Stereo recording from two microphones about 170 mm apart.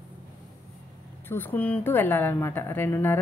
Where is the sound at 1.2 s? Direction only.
10° left (ahead or behind).